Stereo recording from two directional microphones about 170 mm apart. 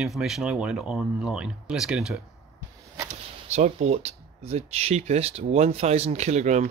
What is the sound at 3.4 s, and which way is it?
Speech, 40° right (ahead or behind).